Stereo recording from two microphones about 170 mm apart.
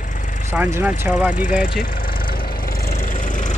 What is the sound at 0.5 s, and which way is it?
Speech, 10° right (ahead or behind).